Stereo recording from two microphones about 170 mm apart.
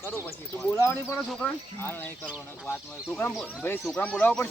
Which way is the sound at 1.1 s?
5° left (ahead or behind).